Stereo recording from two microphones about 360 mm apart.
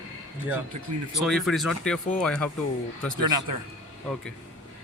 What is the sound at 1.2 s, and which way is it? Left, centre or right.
Speech, centre.